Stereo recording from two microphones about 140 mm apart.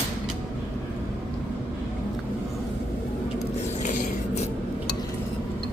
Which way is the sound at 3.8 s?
65° left (ahead or behind).